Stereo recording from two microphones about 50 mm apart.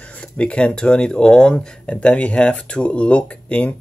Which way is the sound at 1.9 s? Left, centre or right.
Left.